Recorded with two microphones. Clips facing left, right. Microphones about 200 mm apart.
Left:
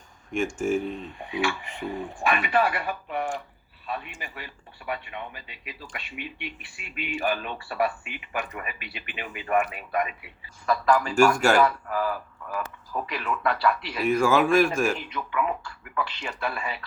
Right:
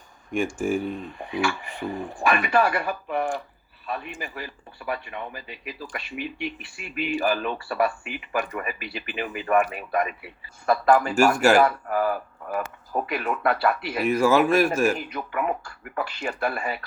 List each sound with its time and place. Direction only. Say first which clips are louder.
0.9 s speech: right 2 dB; 45° right (ahead or behind)
11.1 s speech: right 1 dB; 5° right (ahead or behind)
11.5 s speech: right 3 dB; 45° right (ahead or behind)
14.1 s speech: right 1 dB; 5° right (ahead or behind)
14.9 s speech: even; 40° right (ahead or behind)